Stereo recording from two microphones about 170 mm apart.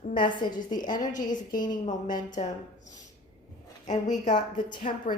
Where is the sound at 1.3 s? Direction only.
50° left (ahead or behind).